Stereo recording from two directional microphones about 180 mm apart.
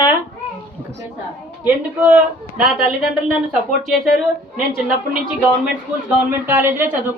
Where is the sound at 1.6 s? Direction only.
10° right (ahead or behind).